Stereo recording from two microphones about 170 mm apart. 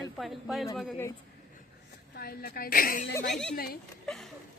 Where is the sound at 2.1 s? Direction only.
65° left (ahead or behind).